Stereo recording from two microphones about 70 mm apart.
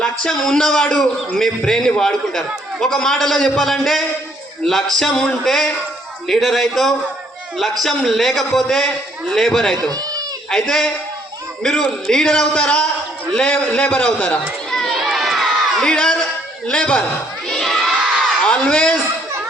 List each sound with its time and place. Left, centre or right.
0.0 s a man's voice: centre
14.7 s crowd: centre
15.0 s crowd: centre
15.8 s a man's voice: centre
17.5 s crowd: centre
18.6 s a man's voice: centre